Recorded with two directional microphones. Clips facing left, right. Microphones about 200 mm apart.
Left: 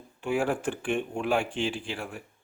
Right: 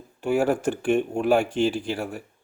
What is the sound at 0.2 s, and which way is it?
Speech, 40° right (ahead or behind).